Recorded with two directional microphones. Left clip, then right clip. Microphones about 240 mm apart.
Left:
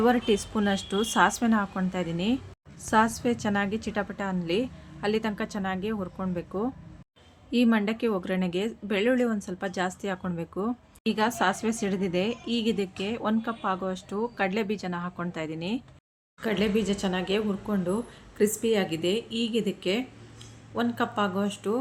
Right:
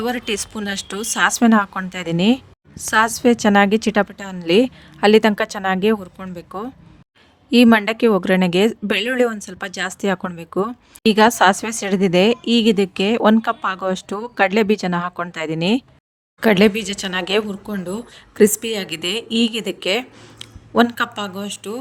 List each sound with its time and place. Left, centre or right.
0.1 s speech: right
4.1 s speech: centre
4.4 s speech: right
6.0 s speech: centre
7.5 s speech: right
17.4 s speech: centre
18.3 s speech: right